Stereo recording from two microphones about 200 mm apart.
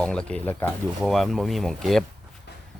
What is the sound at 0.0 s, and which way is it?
Speech, 5° left (ahead or behind).